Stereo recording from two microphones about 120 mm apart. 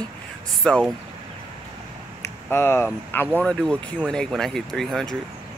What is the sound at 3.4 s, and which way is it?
Speech, 5° left (ahead or behind).